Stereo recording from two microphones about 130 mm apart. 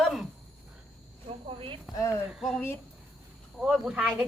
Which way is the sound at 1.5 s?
45° right (ahead or behind).